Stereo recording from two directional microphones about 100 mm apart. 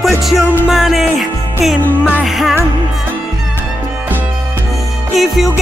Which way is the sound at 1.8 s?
20° left (ahead or behind).